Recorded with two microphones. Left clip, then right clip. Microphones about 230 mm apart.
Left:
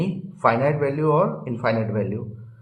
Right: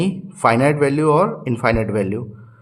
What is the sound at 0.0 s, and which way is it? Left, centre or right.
A man's voice, right.